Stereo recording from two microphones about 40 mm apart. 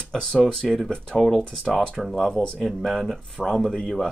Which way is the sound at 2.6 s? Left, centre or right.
Centre.